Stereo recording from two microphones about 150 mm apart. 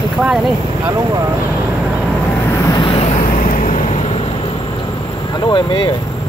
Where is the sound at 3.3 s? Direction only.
60° left (ahead or behind).